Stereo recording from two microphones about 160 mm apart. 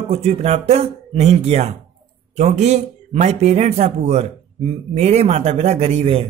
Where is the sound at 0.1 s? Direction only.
40° right (ahead or behind).